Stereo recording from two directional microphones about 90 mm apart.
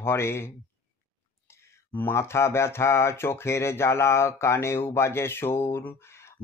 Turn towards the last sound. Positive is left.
turn(degrees=30)  # may be behind; listen again after turning